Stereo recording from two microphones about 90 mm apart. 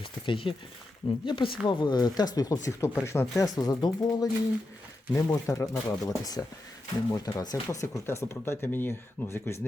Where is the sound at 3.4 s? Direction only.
45° left (ahead or behind).